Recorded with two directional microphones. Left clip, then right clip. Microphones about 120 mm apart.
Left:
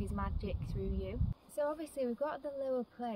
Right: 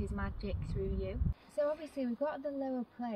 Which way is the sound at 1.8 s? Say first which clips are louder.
Even; 40° left (ahead or behind).